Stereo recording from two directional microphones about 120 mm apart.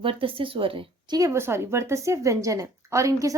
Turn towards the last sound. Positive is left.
turn(degrees=-25)  # may be behind; listen again after turning